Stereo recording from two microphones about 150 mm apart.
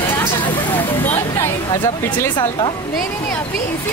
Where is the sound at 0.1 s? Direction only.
15° left (ahead or behind).